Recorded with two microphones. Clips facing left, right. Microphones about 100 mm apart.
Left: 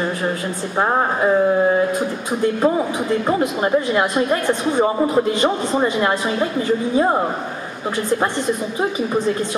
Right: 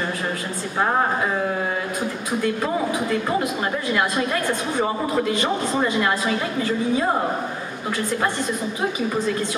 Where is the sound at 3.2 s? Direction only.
25° left (ahead or behind).